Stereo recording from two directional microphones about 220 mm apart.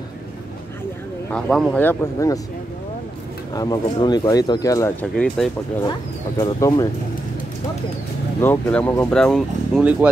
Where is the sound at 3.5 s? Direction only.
15° left (ahead or behind).